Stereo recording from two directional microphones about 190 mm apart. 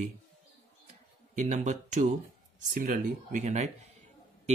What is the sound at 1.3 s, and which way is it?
Speech, 40° right (ahead or behind).